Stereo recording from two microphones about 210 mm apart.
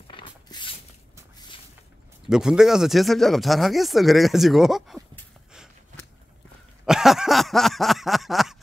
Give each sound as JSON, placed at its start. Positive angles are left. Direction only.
{"t": 0.1, "sound": "a sound", "side_deg": 20}
{"t": 2.2, "sound": "speech", "side_deg": -5}
{"t": 6.9, "sound": "speech", "side_deg": 0}